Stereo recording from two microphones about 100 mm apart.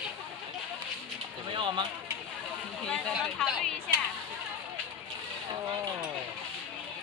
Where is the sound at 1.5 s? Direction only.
50° right (ahead or behind).